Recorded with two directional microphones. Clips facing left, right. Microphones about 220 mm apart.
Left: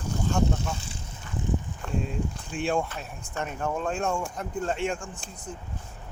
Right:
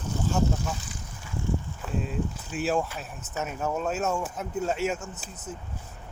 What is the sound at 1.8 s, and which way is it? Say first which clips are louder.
Speech: even; 5° right (ahead or behind).